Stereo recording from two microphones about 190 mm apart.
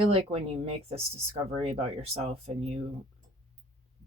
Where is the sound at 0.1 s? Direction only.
35° right (ahead or behind).